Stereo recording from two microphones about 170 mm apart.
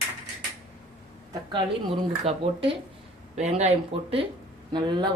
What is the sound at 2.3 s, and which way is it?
Speech, 40° right (ahead or behind).